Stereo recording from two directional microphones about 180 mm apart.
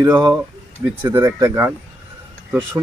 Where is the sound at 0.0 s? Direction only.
15° right (ahead or behind).